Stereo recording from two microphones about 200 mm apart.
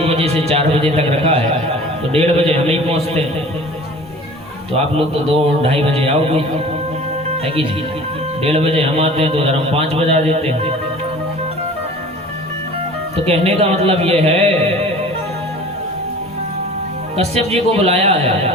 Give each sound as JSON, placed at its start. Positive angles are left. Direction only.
{"t": 0.0, "sound": "a man's voice", "side_deg": -30}
{"t": 5.6, "sound": "a man's voice", "side_deg": -30}
{"t": 7.4, "sound": "a man's voice", "side_deg": -30}
{"t": 13.2, "sound": "a man's voice", "side_deg": -30}
{"t": 17.2, "sound": "a man's voice", "side_deg": -30}